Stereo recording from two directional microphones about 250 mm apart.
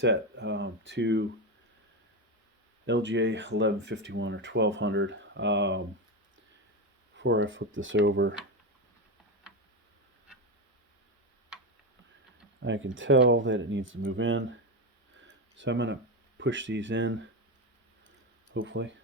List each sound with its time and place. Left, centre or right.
0.0 s speech: right
2.8 s speech: right
7.2 s speech: right
12.5 s speech: right
15.5 s speech: right
18.5 s speech: right